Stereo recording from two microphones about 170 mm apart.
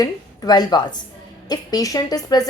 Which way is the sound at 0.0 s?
25° left (ahead or behind).